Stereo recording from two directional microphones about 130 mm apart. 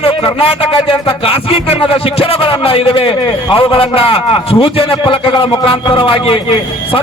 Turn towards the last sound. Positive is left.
turn(degrees=45)  # may be behind; listen again after turning